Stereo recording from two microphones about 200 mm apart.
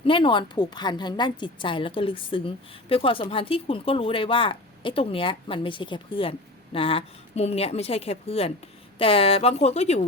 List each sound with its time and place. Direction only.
0.0 s a woman's voice: 25° left (ahead or behind)